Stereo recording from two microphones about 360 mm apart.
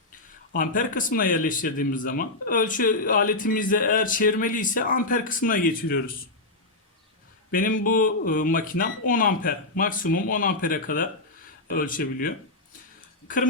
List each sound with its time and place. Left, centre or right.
0.5 s speech: left
7.5 s speech: left